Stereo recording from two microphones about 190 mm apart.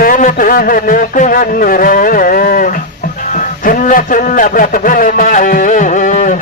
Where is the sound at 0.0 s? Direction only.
45° left (ahead or behind).